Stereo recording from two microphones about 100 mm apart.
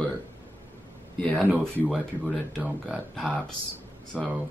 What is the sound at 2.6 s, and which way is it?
Speech, 5° right (ahead or behind).